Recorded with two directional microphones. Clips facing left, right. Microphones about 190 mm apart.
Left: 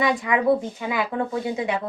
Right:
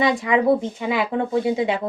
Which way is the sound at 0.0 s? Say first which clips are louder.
Right 3 dB; 25° right (ahead or behind).